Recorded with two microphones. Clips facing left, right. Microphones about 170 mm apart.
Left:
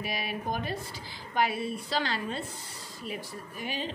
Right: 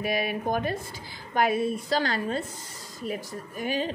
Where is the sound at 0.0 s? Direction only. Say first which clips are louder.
Right 7 dB; 50° right (ahead or behind).